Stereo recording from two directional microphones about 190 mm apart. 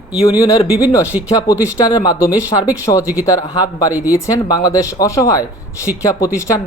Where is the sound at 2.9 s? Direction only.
20° left (ahead or behind).